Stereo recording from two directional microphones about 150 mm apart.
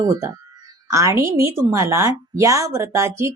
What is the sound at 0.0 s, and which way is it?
A woman's voice, 25° right (ahead or behind).